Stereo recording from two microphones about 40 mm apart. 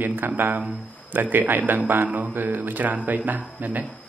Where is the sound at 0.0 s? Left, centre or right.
Right.